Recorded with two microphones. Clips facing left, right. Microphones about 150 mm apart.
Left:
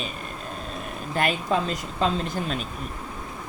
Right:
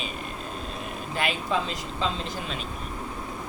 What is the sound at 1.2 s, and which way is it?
Speech, 45° left (ahead or behind).